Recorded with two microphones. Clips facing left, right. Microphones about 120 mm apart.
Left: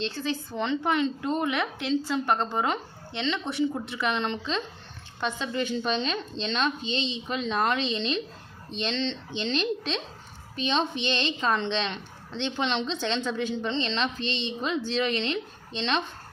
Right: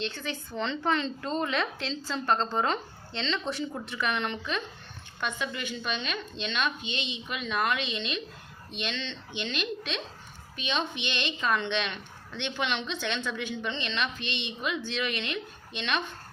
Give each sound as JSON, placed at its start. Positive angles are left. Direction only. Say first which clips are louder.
{"t": 0.0, "sound": "a woman's voice", "louder": "left 4 dB", "side_deg": 30}